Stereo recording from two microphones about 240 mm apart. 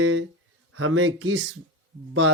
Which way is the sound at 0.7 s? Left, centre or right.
Right.